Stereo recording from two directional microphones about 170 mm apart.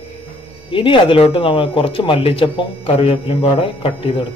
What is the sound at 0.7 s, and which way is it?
Speech, 30° left (ahead or behind).